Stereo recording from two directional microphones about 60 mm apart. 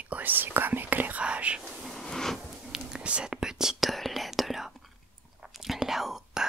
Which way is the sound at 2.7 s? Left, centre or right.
Centre.